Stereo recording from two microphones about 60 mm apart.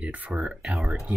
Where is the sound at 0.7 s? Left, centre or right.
Centre.